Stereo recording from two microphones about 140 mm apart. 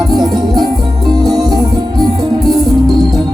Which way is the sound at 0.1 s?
30° right (ahead or behind).